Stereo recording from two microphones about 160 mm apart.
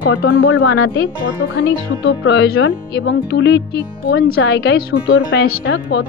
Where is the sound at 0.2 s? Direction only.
75° left (ahead or behind).